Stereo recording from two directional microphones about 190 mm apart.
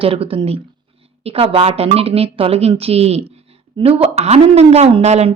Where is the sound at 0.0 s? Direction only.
30° right (ahead or behind).